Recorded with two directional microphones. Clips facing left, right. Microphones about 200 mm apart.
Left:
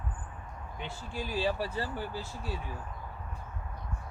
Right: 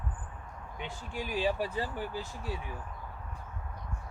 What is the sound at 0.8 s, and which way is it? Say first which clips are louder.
Speech: even; 15° right (ahead or behind).